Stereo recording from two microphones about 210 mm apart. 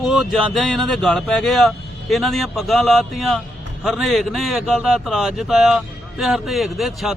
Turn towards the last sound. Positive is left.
turn(degrees=0)  # may be behind; listen again after turning